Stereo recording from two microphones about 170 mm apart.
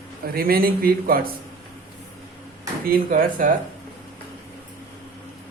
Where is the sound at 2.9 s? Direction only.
55° right (ahead or behind).